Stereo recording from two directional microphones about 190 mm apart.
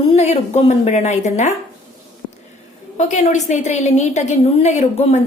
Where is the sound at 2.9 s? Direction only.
40° left (ahead or behind).